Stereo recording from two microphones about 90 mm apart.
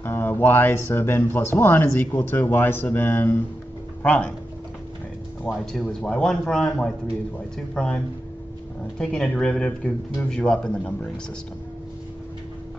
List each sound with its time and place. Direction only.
0.0 s speech: 25° left (ahead or behind)
5.5 s a man's voice: 5° left (ahead or behind)